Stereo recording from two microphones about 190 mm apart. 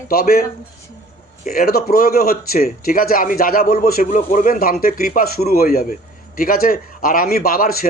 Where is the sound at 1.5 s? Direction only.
50° left (ahead or behind).